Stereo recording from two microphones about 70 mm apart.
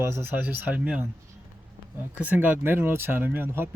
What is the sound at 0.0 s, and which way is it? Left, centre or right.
Speech, right.